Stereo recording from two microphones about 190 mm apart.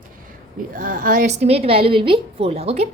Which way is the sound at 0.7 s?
45° right (ahead or behind).